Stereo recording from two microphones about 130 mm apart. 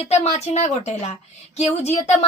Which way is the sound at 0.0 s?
55° left (ahead or behind).